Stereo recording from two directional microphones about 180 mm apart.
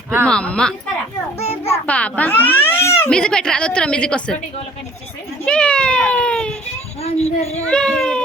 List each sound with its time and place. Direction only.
0.3 s a child's voice: 5° left (ahead or behind)
5.5 s baby cry: 5° left (ahead or behind)
7.0 s a sound: 35° left (ahead or behind)
7.7 s speech: 5° left (ahead or behind)